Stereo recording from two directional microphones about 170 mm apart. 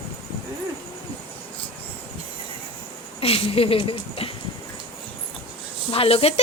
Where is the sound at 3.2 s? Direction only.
35° left (ahead or behind).